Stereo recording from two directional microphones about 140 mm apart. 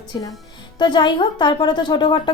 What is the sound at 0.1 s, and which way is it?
A woman's voice, 25° left (ahead or behind).